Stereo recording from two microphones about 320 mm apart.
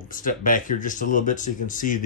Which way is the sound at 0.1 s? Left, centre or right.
Left.